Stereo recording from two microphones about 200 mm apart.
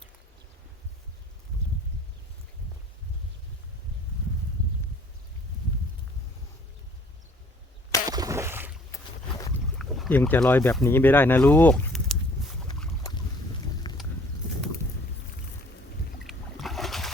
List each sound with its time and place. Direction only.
8.0 s a sound: 20° right (ahead or behind)
8.9 s boat: 15° left (ahead or behind)
9.7 s boat: centre (ahead or behind)
10.2 s speech: 10° left (ahead or behind)
13.0 s boat: 20° left (ahead or behind)
16.2 s boat: centre (ahead or behind)